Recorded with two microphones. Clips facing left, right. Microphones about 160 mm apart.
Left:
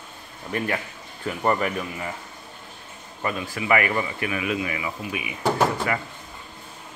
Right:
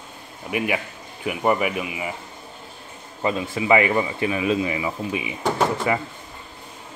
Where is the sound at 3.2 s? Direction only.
20° right (ahead or behind).